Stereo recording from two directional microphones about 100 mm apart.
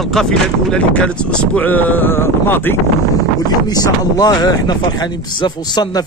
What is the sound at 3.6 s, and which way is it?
Speech, 40° left (ahead or behind).